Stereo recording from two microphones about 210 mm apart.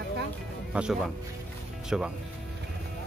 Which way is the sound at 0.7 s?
5° right (ahead or behind).